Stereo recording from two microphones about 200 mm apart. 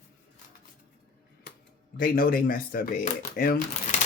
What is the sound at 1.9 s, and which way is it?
Speech, 45° left (ahead or behind).